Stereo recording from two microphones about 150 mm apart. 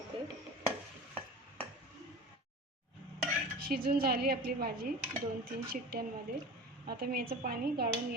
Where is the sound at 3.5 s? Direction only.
90° right.